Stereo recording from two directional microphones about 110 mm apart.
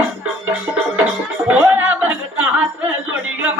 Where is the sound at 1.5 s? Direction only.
15° right (ahead or behind).